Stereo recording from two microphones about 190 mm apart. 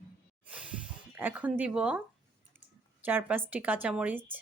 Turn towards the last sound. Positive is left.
turn(degrees=-5)  # may be behind; listen again after turning